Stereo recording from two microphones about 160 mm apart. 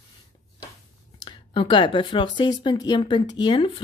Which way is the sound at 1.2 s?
30° left (ahead or behind).